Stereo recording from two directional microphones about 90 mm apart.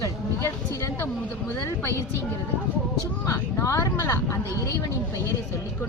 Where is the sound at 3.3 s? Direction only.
35° left (ahead or behind).